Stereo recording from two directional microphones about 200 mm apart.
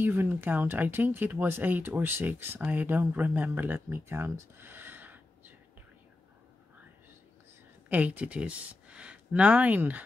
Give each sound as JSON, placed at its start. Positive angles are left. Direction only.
{"t": 0.0, "sound": "speech", "side_deg": -10}
{"t": 7.9, "sound": "speech", "side_deg": -10}